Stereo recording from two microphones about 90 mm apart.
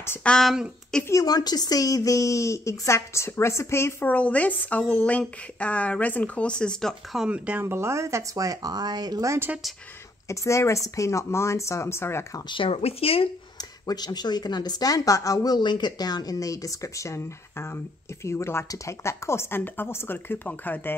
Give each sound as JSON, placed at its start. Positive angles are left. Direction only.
{"t": 0.2, "sound": "speech", "side_deg": 10}
{"t": 1.2, "sound": "a woman's voice", "side_deg": 45}
{"t": 4.1, "sound": "speech", "side_deg": 15}
{"t": 7.2, "sound": "speech", "side_deg": -15}
{"t": 7.6, "sound": "speech", "side_deg": -30}
{"t": 10.2, "sound": "a woman's voice", "side_deg": 35}
{"t": 12.4, "sound": "speech", "side_deg": 80}
{"t": 13.6, "sound": "a woman's voice", "side_deg": 45}